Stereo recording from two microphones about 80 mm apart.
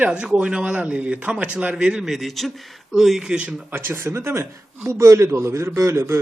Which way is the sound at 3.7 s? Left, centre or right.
Right.